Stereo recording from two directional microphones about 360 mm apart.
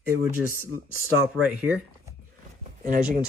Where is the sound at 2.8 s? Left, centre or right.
Right.